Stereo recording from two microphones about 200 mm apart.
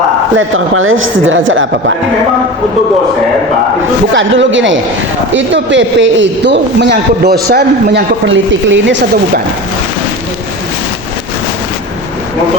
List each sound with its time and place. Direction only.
0.3 s speech: 80° right
4.1 s a man's voice: 70° right (ahead or behind)